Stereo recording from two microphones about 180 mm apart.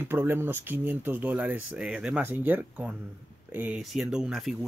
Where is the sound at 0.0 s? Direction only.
10° right (ahead or behind).